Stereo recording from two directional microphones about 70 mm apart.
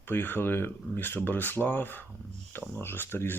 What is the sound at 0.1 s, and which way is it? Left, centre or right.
Speech, left.